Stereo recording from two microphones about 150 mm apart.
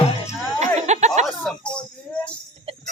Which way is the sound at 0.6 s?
50° right (ahead or behind).